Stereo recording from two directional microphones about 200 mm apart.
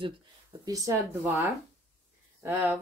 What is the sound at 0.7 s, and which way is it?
Speech, 15° right (ahead or behind).